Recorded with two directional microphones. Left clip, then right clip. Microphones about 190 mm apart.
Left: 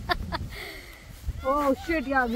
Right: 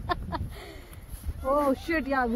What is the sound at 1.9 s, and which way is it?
Speech, 50° right (ahead or behind).